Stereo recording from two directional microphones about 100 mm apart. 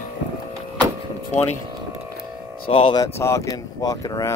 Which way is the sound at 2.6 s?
70° left (ahead or behind).